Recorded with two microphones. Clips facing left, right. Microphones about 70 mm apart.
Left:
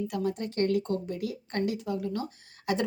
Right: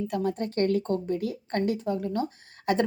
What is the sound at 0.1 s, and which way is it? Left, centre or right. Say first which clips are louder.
Speech: right 3 dB; right.